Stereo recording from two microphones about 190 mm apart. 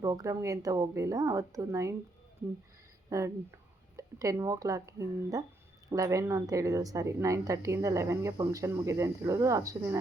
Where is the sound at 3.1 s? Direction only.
15° right (ahead or behind).